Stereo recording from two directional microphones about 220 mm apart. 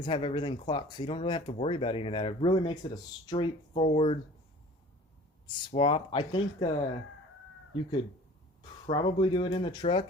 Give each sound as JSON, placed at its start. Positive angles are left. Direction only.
{"t": 0.0, "sound": "speech", "side_deg": 25}
{"t": 5.7, "sound": "speech", "side_deg": 25}